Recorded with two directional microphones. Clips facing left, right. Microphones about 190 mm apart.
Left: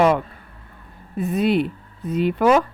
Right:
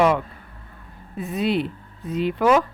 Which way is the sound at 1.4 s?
50° left (ahead or behind).